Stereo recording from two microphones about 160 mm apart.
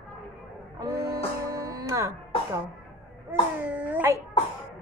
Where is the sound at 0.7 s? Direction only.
15° right (ahead or behind).